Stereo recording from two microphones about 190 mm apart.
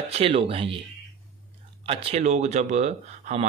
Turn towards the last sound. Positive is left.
turn(degrees=-35)  # may be behind; listen again after turning